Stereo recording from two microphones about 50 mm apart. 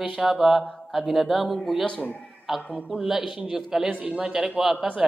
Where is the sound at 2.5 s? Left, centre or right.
Centre.